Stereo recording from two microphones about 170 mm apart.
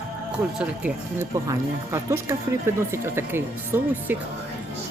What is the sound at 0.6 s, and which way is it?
Speech, 10° right (ahead or behind).